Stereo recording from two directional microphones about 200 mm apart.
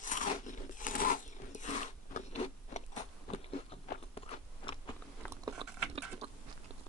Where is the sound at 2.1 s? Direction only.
35° left (ahead or behind).